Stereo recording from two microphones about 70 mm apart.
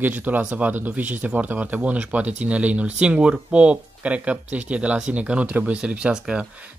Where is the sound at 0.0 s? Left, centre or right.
Right.